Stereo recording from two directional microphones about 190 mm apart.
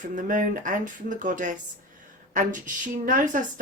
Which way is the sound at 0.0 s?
45° right (ahead or behind).